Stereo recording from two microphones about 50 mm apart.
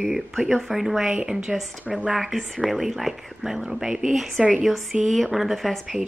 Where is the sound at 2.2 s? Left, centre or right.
Centre.